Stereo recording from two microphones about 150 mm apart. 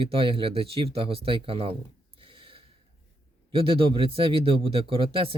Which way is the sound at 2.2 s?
35° right (ahead or behind).